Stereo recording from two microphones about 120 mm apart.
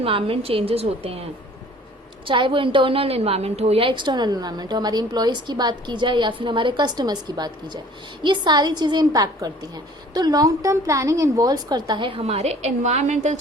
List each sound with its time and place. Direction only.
0.0 s a woman's voice: 50° right (ahead or behind)
2.2 s a woman's voice: 45° right (ahead or behind); by 13.4 s 80° right